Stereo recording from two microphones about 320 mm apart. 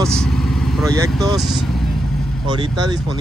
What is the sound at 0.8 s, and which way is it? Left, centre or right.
Speech, centre.